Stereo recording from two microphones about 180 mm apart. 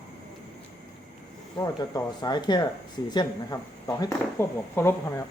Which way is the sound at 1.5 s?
20° left (ahead or behind).